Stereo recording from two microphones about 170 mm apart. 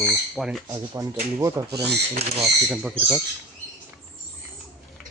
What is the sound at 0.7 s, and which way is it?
Speech, 20° right (ahead or behind).